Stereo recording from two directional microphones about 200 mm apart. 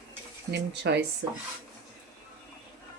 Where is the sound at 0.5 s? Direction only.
55° right (ahead or behind).